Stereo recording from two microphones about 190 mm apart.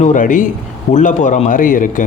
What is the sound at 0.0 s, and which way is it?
A man's voice, 40° left (ahead or behind).